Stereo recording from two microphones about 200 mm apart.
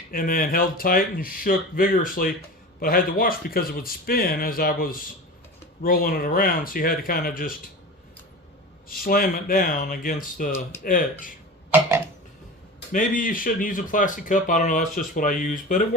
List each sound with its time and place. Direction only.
0.1 s speech: 45° left (ahead or behind)
8.9 s speech: 45° left (ahead or behind)
11.7 s a sound: 10° right (ahead or behind)
12.9 s speech: 45° left (ahead or behind)